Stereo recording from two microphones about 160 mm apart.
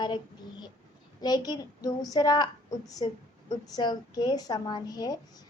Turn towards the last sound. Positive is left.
turn(degrees=25)  # may be behind; listen again after turning